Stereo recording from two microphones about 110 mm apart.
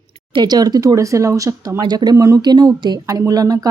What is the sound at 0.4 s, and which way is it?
Speech, 35° right (ahead or behind).